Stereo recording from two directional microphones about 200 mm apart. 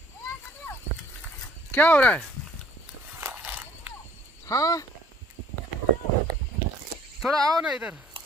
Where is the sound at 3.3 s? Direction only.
10° right (ahead or behind).